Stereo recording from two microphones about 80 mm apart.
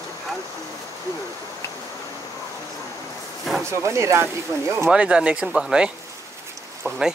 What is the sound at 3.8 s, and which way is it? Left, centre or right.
Speech, right.